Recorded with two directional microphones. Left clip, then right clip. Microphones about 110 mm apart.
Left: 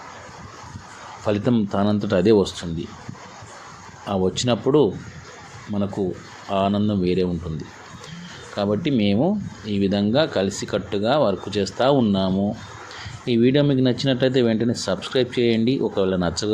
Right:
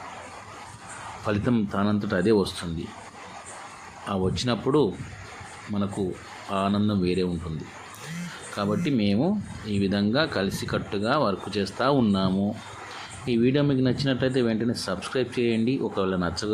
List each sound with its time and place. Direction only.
1.2 s speech: 10° left (ahead or behind)
4.0 s speech: 15° left (ahead or behind)
5.7 s speech: 5° left (ahead or behind)
8.5 s speech: 15° left (ahead or behind)
13.2 s speech: 20° left (ahead or behind)